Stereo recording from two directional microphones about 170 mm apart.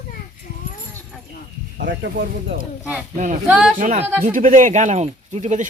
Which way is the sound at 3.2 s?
50° right (ahead or behind).